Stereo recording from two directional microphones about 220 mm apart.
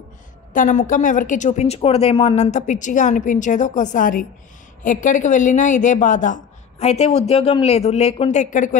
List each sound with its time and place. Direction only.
0.5 s a woman's voice: 35° left (ahead or behind)